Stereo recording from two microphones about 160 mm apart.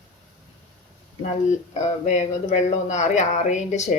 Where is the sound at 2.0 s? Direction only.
50° left (ahead or behind).